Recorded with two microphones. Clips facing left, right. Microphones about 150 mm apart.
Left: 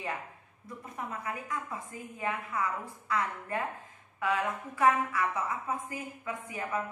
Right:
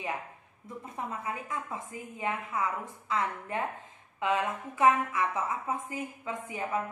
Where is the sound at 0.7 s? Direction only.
25° right (ahead or behind).